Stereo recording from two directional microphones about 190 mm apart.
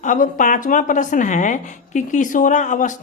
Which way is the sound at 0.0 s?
45° left (ahead or behind).